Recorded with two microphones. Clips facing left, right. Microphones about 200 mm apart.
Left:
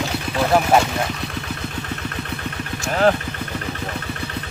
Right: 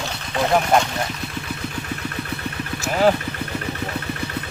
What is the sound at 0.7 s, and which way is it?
Speech, 5° left (ahead or behind).